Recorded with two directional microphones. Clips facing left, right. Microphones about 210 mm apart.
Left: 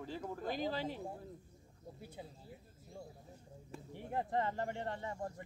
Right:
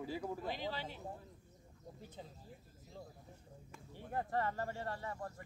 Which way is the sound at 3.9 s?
20° left (ahead or behind).